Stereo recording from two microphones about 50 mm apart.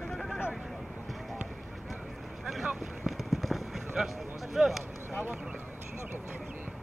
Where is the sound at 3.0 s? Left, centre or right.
Centre.